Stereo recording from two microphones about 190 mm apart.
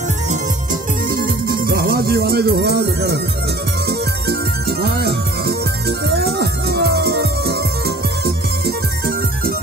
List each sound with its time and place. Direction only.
1.1 s music: 50° right (ahead or behind)
4.3 s music: 55° right (ahead or behind)